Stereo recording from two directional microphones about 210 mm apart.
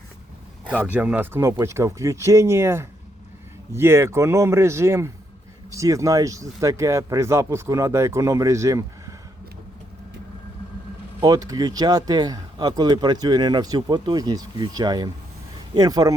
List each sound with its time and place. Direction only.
0.9 s speech: 10° right (ahead or behind)
11.2 s speech: 15° right (ahead or behind)